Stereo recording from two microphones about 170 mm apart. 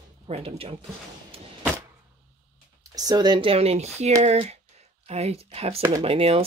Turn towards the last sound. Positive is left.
turn(degrees=-35)  # may be behind; listen again after turning